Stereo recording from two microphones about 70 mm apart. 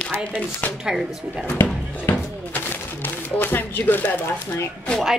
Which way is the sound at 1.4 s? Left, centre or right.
Left.